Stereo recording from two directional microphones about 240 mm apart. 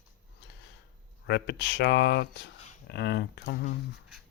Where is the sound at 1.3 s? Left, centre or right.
Left.